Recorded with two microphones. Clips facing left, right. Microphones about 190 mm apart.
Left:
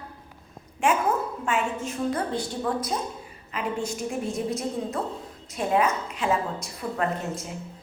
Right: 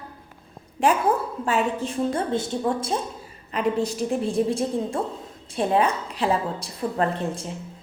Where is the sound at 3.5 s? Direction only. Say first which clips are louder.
Right 6 dB; 35° right (ahead or behind).